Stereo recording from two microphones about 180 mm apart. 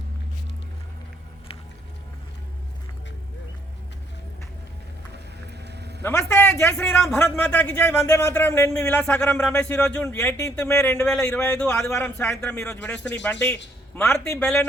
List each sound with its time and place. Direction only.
5.6 s vehicle: 70° right (ahead or behind)
6.0 s speech: 10° left (ahead or behind)